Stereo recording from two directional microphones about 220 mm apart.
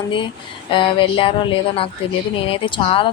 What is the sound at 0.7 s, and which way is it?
Speech, 20° left (ahead or behind).